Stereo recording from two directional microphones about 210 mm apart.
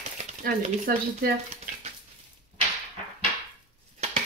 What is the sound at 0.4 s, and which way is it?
Speech, 45° right (ahead or behind).